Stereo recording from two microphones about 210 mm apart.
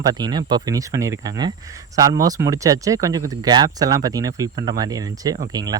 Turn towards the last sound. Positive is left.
turn(degrees=-20)  # may be behind; listen again after turning